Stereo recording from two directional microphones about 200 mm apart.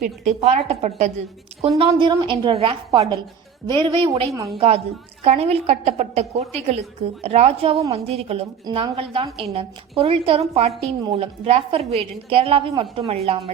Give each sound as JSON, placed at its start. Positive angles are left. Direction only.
{"t": 0.0, "sound": "a woman's voice", "side_deg": -35}